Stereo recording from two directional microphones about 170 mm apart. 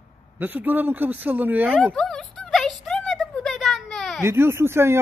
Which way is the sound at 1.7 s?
5° left (ahead or behind).